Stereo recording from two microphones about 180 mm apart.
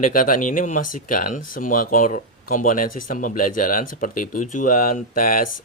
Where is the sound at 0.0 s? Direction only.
50° left (ahead or behind).